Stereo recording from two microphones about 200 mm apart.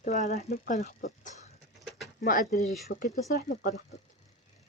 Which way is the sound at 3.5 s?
40° left (ahead or behind).